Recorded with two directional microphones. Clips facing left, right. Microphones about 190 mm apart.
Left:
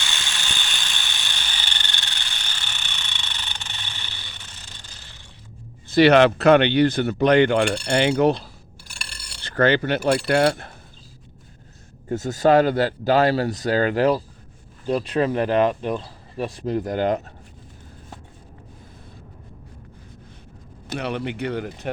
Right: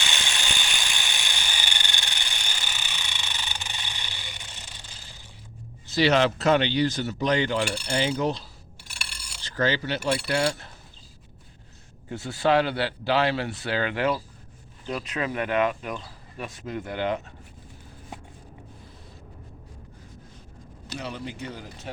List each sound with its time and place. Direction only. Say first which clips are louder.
0.0 s ratchet: right 1 dB; 15° right (ahead or behind)
5.9 s speech: left 7 dB; 60° left (ahead or behind)
8.8 s filing: even; centre (ahead or behind)
9.4 s speech: left 7 dB; 60° left (ahead or behind)
12.0 s speech: left 6 dB; 45° left (ahead or behind)
20.8 s speech: left 8 dB; 60° left (ahead or behind)